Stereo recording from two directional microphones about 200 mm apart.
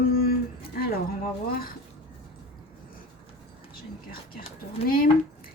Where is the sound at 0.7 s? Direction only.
50° left (ahead or behind).